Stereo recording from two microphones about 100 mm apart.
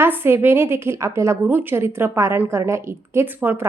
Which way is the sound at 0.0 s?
20° right (ahead or behind).